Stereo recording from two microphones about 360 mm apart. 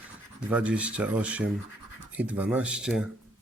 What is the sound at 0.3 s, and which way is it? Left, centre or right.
A man's voice, centre.